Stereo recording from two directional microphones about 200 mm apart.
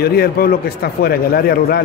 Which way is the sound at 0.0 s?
50° left (ahead or behind).